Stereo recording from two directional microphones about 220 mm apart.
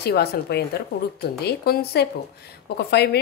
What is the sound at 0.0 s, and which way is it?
A woman's voice, 45° left (ahead or behind).